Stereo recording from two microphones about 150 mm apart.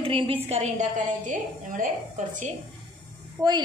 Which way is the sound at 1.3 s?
60° right (ahead or behind).